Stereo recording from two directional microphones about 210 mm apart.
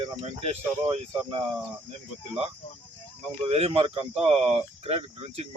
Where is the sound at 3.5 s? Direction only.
30° right (ahead or behind).